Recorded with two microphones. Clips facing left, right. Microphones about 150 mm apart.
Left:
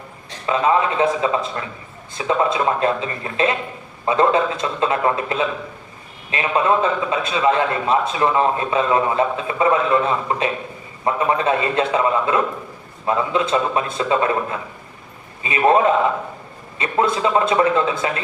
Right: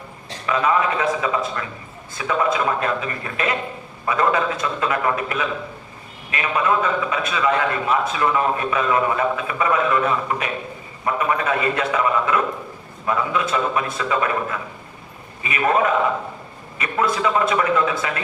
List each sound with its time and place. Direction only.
0.4 s a man's voice: 25° left (ahead or behind)
15.4 s a man's voice: 25° left (ahead or behind)